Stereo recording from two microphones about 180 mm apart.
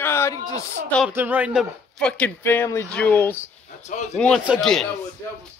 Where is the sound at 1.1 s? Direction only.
10° right (ahead or behind); by 3.3 s 10° left (ahead or behind).